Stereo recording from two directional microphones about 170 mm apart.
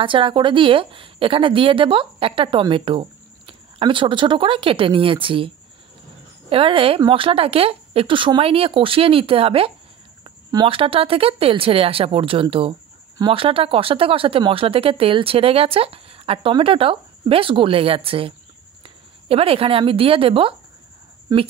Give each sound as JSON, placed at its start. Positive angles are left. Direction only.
{"t": 0.0, "sound": "a woman's voice", "side_deg": -30}
{"t": 6.5, "sound": "a woman's voice", "side_deg": -30}
{"t": 21.3, "sound": "a woman's voice", "side_deg": -20}